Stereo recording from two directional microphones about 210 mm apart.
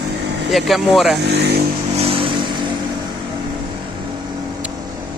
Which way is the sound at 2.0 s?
25° right (ahead or behind).